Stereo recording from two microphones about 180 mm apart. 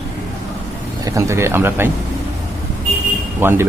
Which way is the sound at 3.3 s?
15° right (ahead or behind).